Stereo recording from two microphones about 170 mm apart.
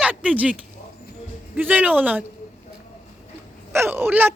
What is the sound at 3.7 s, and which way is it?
Speech, 15° right (ahead or behind).